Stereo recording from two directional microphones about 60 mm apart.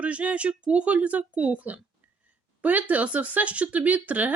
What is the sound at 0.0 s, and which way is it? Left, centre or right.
A woman's voice, right.